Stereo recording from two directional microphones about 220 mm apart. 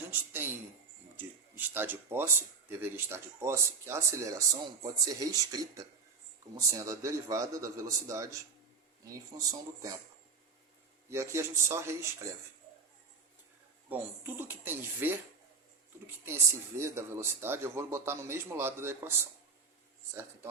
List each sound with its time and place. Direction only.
0.1 s speech: 10° right (ahead or behind)
11.1 s speech: 10° right (ahead or behind)
13.9 s speech: 10° right (ahead or behind)
16.2 s speech: 10° right (ahead or behind)